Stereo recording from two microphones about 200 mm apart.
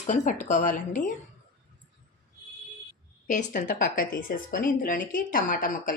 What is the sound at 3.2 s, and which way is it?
A woman's voice, 40° left (ahead or behind).